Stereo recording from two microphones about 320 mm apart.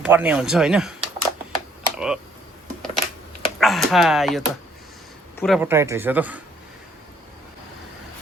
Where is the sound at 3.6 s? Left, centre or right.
Centre.